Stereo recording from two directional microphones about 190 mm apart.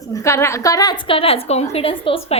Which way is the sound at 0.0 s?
15° left (ahead or behind).